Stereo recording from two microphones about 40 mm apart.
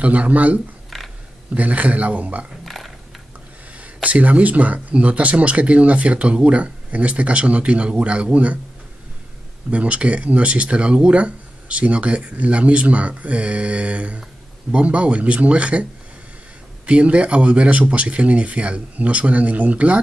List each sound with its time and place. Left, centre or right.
0.0 s speech: right
0.8 s a sound: centre
1.5 s speech: right
2.6 s a sound: centre
3.8 s speech: right
9.7 s speech: right